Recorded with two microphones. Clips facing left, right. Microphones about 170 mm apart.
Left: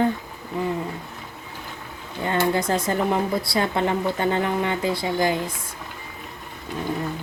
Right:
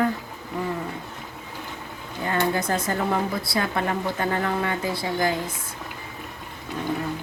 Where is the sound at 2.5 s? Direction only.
20° left (ahead or behind).